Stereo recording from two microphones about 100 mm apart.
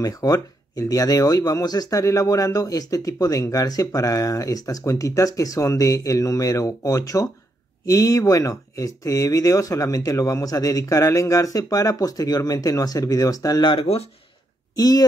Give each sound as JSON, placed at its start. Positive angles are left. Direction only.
{"t": 0.0, "sound": "speech", "side_deg": 40}
{"t": 13.7, "sound": "speech", "side_deg": 75}
{"t": 14.8, "sound": "speech", "side_deg": 40}